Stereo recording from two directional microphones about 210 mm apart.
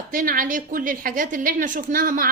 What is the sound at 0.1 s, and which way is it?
A woman's voice, 40° right (ahead or behind).